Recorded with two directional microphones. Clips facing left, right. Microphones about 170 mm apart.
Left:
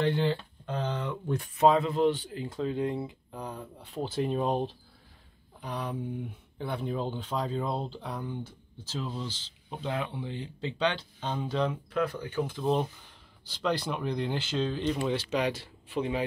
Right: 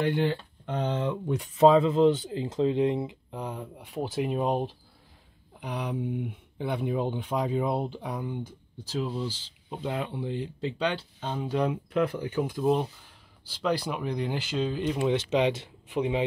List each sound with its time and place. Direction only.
0.0 s speech: 15° right (ahead or behind)
15.1 s speech: 20° right (ahead or behind)